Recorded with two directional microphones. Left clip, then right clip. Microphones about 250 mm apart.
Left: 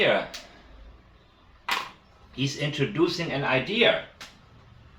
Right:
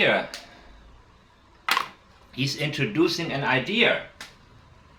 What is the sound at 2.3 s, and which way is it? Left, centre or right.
Speech, right.